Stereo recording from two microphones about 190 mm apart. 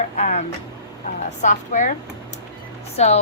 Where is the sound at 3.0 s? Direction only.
35° left (ahead or behind).